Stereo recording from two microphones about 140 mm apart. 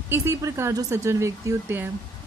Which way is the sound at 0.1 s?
20° right (ahead or behind).